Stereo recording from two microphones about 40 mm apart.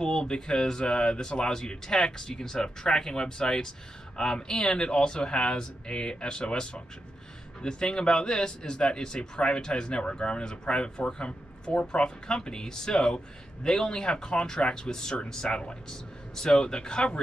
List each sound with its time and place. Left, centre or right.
0.0 s speech: left